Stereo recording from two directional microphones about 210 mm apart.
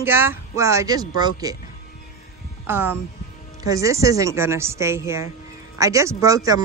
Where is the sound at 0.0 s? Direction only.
10° right (ahead or behind).